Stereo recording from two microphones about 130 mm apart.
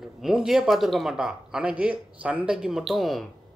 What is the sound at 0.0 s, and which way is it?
Speech, centre (ahead or behind).